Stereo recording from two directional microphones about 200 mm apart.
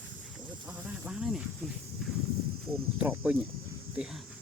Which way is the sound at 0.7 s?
5° right (ahead or behind).